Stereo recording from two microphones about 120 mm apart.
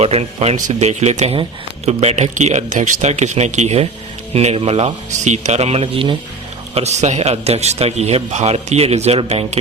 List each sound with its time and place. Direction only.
0.0 s a man's voice: 60° right (ahead or behind)
4.4 s a man's voice: 60° right (ahead or behind)
6.7 s a man's voice: 70° right (ahead or behind)